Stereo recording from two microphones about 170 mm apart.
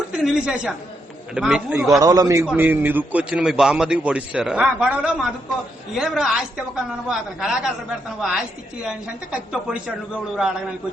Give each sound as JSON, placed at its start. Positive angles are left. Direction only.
{"t": 0.2, "sound": "a man's voice", "side_deg": -5}
{"t": 2.0, "sound": "a man's voice", "side_deg": -20}